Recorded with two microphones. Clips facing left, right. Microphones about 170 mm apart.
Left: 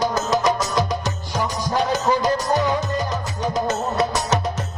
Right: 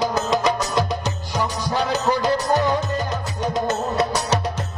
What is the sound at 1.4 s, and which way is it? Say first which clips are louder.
Music: left 1 dB; 40° left (ahead or behind).